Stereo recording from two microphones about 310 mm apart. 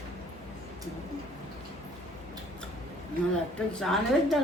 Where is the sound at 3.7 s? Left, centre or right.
Centre.